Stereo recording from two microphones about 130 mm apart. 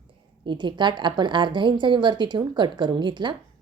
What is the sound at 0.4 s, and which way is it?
A woman's voice, 35° right (ahead or behind).